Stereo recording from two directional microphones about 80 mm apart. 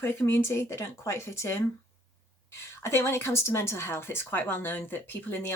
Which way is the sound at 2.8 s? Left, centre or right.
Left.